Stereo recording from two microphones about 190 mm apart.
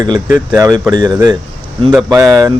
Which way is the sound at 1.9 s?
10° right (ahead or behind).